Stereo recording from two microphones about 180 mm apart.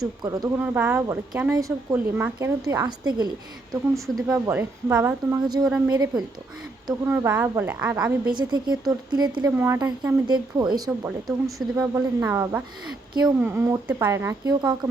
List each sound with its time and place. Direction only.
0.2 s a woman's voice: 20° right (ahead or behind)
3.9 s speech: centre (ahead or behind)
4.3 s a woman's voice: 15° right (ahead or behind)
8.3 s a woman's voice: 25° right (ahead or behind)